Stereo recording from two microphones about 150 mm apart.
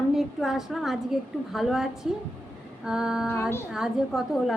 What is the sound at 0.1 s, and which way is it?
A woman's voice, centre (ahead or behind).